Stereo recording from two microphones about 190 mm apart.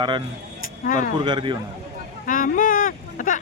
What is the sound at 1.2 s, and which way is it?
Speech, 25° right (ahead or behind).